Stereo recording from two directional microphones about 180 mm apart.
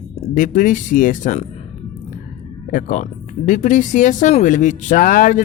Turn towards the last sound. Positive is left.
turn(degrees=50)  # may be behind; listen again after turning